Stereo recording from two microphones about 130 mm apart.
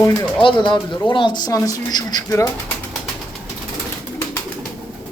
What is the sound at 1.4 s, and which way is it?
Speech, 30° left (ahead or behind).